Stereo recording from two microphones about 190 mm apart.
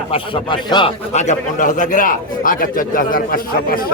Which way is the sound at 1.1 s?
40° left (ahead or behind).